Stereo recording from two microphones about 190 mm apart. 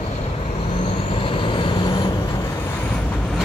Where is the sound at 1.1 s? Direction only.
25° left (ahead or behind).